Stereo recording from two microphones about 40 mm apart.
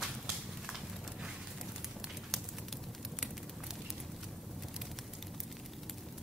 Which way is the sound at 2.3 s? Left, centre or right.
Centre.